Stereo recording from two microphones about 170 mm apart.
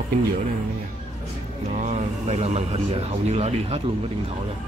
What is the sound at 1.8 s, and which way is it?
Speech, 40° right (ahead or behind).